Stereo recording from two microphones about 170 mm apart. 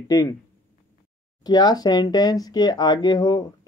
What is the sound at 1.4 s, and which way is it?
Speech, 25° left (ahead or behind).